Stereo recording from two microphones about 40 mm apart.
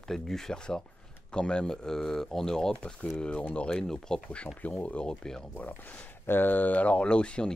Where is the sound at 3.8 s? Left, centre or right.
Centre.